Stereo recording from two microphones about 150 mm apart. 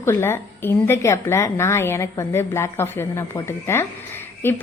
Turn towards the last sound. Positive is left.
turn(degrees=15)  # may be behind; listen again after turning